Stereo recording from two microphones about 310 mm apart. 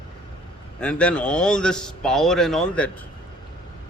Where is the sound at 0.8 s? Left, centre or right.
Centre.